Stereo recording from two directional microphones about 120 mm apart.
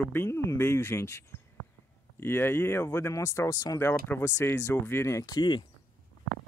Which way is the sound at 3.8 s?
20° left (ahead or behind).